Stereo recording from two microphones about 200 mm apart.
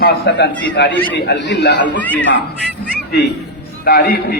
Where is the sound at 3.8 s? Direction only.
50° left (ahead or behind).